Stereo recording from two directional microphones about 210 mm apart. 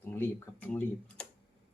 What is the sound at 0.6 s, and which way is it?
Speech, 10° left (ahead or behind).